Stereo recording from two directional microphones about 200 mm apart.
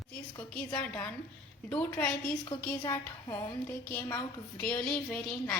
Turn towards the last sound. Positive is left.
turn(degrees=5)  # may be behind; listen again after turning